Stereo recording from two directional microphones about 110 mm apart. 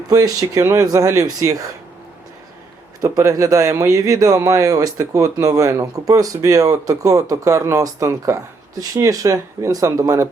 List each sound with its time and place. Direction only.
0.1 s speech: 35° right (ahead or behind)
3.0 s speech: 30° right (ahead or behind)